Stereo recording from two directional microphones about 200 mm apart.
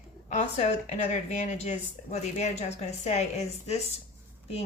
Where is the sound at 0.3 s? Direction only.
35° left (ahead or behind).